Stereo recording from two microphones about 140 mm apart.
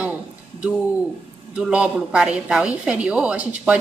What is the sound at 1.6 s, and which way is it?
A woman's voice, 5° right (ahead or behind).